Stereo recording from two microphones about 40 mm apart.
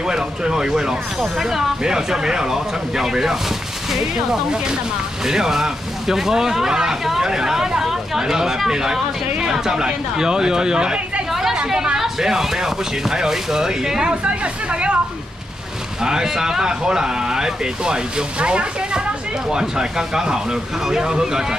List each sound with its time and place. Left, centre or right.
0.0 s speech: centre
11.5 s a sound: centre
12.0 s speech: centre
14.0 s speech: right
16.0 s speech: centre